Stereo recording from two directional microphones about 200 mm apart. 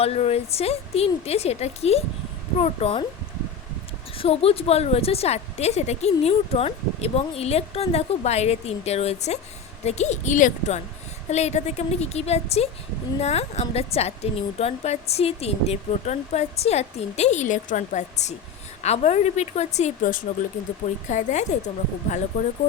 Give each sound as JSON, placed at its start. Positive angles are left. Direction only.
{"t": 0.0, "sound": "a woman's voice", "side_deg": 30}
{"t": 4.2, "sound": "a woman's voice", "side_deg": 30}